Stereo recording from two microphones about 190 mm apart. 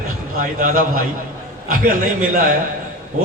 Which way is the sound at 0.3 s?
45° right (ahead or behind).